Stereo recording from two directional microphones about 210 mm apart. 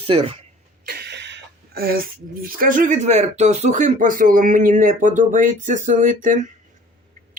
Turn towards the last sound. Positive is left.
turn(degrees=-35)  # may be behind; listen again after turning